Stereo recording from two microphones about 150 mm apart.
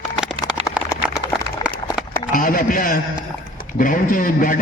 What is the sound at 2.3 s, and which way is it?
A man's voice, 70° left (ahead or behind).